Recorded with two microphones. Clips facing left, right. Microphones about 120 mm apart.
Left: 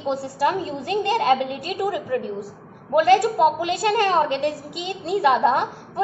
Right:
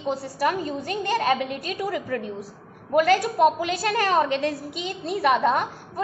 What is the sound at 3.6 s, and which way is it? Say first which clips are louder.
A woman's voice: left 3 dB; 25° left (ahead or behind).